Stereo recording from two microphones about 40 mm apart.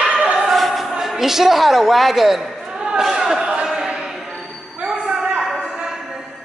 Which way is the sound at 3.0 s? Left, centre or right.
Centre.